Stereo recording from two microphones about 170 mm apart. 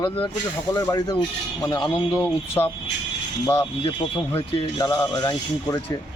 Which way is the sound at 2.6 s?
20° left (ahead or behind).